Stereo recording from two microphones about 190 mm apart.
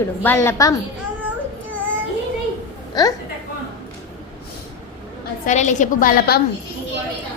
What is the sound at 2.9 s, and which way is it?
Speech, 20° left (ahead or behind).